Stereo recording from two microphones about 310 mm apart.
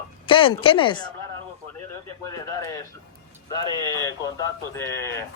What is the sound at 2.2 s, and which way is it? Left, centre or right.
Speech, centre.